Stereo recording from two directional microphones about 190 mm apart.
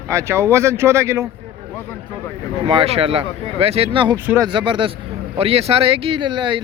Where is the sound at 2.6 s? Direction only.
30° right (ahead or behind).